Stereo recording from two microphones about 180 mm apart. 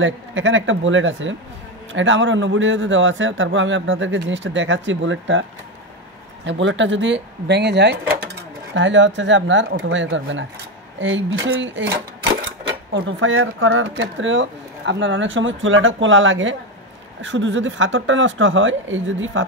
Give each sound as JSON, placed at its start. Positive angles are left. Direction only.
{"t": 0.0, "sound": "speech", "side_deg": -90}
{"t": 6.4, "sound": "speech", "side_deg": -90}
{"t": 8.7, "sound": "speech", "side_deg": -90}